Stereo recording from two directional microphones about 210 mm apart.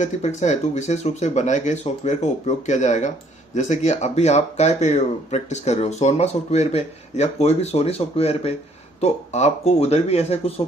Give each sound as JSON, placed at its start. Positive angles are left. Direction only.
{"t": 0.0, "sound": "speech", "side_deg": 35}